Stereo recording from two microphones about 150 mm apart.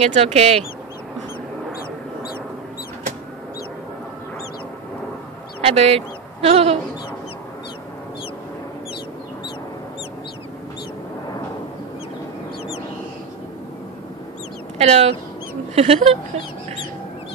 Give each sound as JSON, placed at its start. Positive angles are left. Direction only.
{"t": 0.0, "sound": "speech", "side_deg": -45}
{"t": 5.6, "sound": "speech", "side_deg": -45}
{"t": 14.8, "sound": "speech", "side_deg": -45}